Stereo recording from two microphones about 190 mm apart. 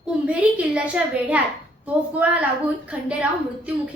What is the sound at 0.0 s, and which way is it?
A child's voice, 5° right (ahead or behind).